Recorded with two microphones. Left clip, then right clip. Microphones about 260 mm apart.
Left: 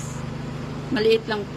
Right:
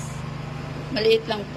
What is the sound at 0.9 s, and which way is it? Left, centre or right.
Speech, centre.